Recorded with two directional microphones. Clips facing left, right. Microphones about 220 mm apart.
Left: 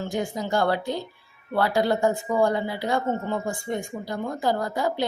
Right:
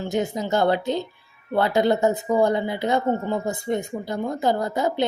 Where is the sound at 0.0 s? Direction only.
20° right (ahead or behind).